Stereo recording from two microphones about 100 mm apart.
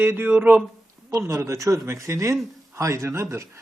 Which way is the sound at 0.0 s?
20° right (ahead or behind).